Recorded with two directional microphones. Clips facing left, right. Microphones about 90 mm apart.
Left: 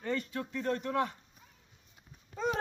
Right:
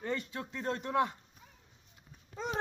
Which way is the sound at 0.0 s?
20° right (ahead or behind).